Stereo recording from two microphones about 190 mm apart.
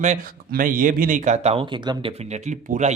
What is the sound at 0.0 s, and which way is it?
Speech, 45° right (ahead or behind).